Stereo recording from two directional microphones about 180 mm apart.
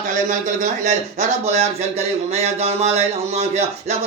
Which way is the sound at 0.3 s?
45° right (ahead or behind).